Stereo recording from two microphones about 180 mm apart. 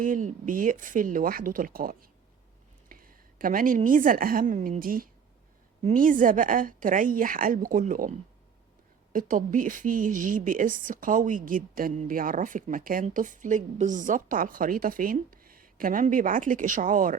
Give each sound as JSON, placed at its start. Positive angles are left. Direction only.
{"t": 0.0, "sound": "a woman's voice", "side_deg": -45}
{"t": 9.1, "sound": "a woman's voice", "side_deg": -50}